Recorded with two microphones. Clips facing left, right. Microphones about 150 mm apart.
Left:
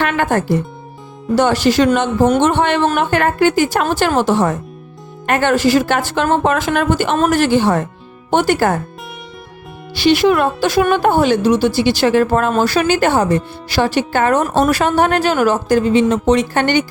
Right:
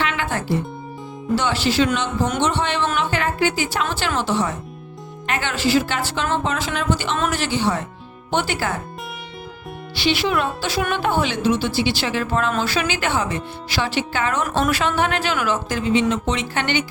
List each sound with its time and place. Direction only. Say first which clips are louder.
0.0 s speech: left 8 dB; 50° left (ahead or behind)
9.9 s a woman's voice: left 8 dB; 45° left (ahead or behind)